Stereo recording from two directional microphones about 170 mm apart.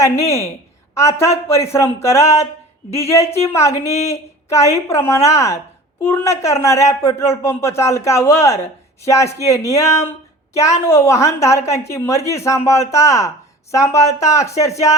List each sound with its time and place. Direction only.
0.0 s speech: 20° left (ahead or behind)
14.0 s speech: 40° left (ahead or behind)
14.3 s speech: 20° left (ahead or behind)